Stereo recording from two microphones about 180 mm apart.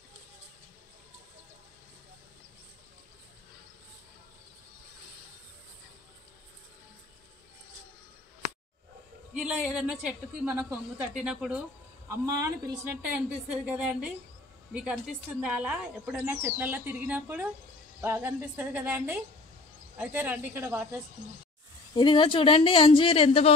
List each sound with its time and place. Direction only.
9.3 s a woman's voice: 5° right (ahead or behind)
12.1 s a woman's voice: 15° right (ahead or behind)
21.9 s a woman's voice: 25° left (ahead or behind)